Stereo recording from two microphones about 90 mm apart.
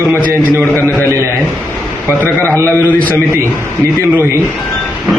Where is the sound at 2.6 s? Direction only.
20° left (ahead or behind).